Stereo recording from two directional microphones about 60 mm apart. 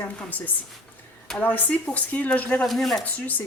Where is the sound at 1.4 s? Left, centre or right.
Left.